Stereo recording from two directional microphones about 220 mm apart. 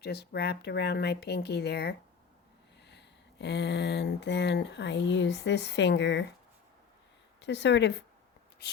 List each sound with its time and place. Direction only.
0.0 s speech: 45° left (ahead or behind)
7.4 s speech: 50° left (ahead or behind)